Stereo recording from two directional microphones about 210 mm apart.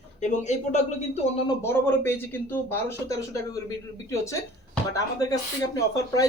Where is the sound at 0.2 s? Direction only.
35° left (ahead or behind).